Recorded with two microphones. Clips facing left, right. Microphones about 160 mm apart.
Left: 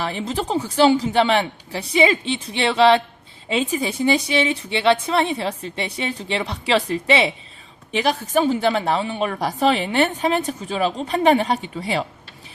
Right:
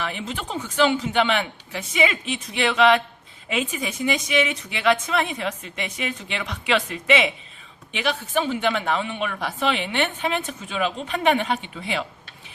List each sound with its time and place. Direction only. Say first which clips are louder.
0.0 s a woman's voice: left 5 dB; 35° left (ahead or behind)